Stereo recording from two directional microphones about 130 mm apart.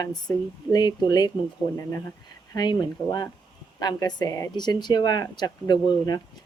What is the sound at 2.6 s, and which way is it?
A woman's voice, 30° left (ahead or behind).